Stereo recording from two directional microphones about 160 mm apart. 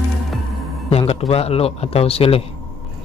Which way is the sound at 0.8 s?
40° left (ahead or behind).